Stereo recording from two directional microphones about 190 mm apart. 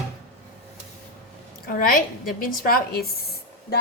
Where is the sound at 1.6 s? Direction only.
50° left (ahead or behind).